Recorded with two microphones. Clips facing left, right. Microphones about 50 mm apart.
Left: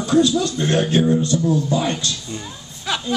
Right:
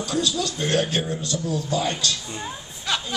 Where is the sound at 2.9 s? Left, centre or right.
Centre.